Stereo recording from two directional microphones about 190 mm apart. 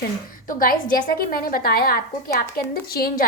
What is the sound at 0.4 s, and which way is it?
A woman's voice, 45° left (ahead or behind).